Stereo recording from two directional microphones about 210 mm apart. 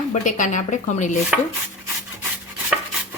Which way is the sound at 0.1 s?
35° left (ahead or behind).